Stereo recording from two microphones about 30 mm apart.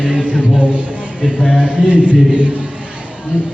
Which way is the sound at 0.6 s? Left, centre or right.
Right.